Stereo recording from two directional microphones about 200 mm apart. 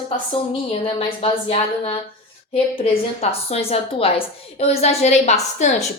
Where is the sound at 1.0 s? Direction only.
30° left (ahead or behind).